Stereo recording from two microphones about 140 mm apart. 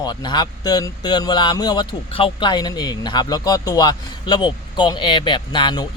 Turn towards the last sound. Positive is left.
turn(degrees=30)  # may be behind; listen again after turning